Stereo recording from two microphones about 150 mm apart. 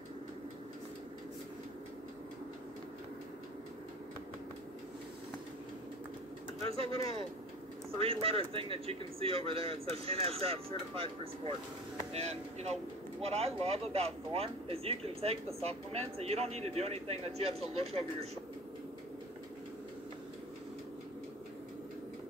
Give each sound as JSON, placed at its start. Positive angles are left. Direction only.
{"t": 6.6, "sound": "speech", "side_deg": -40}
{"t": 8.0, "sound": "speech", "side_deg": -40}